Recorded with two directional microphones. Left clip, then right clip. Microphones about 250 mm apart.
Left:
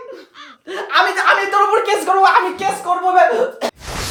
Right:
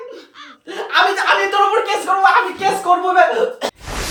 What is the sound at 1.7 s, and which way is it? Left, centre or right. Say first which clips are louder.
Speech: left 1 dB; left.